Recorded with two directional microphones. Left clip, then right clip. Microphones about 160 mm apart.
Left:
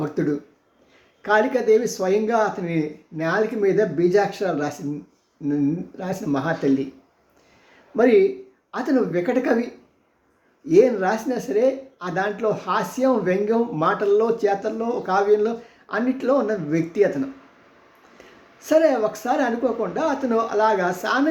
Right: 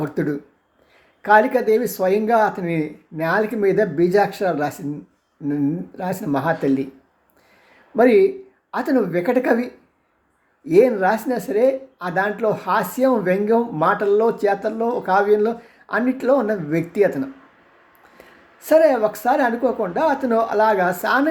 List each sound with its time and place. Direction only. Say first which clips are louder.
0.0 s a woman's voice: right 1 dB; 20° right (ahead or behind)
7.9 s a woman's voice: right 2 dB; 20° right (ahead or behind)
10.7 s a woman's voice: right 2 dB; 20° right (ahead or behind)
18.6 s a woman's voice: right 3 dB; 20° right (ahead or behind)